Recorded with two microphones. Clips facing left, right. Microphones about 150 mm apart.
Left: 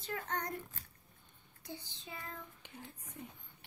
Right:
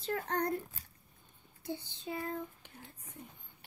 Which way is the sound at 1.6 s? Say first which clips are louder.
Right 8 dB; 35° right (ahead or behind).